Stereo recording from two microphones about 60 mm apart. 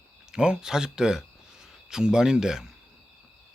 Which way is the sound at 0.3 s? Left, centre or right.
Centre.